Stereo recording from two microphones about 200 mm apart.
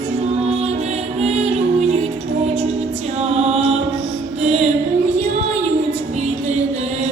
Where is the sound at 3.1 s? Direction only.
30° right (ahead or behind).